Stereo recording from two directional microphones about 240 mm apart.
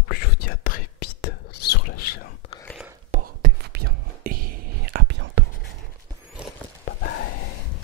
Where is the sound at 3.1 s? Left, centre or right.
Right.